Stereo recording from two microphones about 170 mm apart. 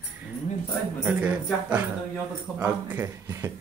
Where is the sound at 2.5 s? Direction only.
15° right (ahead or behind).